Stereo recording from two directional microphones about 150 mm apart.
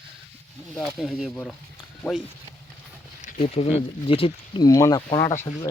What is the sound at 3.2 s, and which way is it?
Speech, 45° left (ahead or behind).